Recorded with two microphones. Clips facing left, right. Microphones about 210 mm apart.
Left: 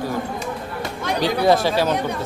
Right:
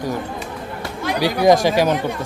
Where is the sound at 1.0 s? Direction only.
10° right (ahead or behind).